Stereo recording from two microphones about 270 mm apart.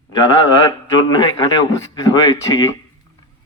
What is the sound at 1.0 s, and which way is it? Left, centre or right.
A man's voice, centre.